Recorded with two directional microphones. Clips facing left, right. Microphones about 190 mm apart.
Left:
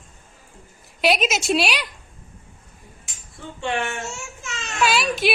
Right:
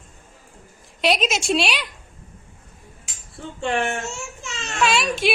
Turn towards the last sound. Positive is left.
turn(degrees=0)  # may be behind; listen again after turning